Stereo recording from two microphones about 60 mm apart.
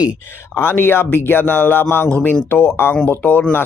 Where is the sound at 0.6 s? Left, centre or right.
Left.